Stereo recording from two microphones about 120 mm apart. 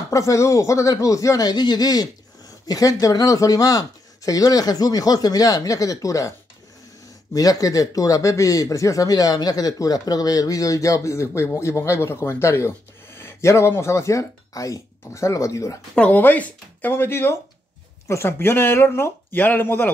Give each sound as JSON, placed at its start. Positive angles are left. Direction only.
{"t": 0.1, "sound": "speech", "side_deg": 25}
{"t": 7.3, "sound": "speech", "side_deg": 30}
{"t": 15.9, "sound": "speech", "side_deg": 10}